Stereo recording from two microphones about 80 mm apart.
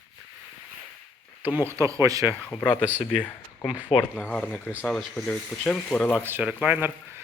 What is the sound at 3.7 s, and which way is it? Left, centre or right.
Speech, left.